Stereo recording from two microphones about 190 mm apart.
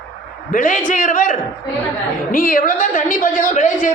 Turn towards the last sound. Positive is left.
turn(degrees=40)  # may be behind; listen again after turning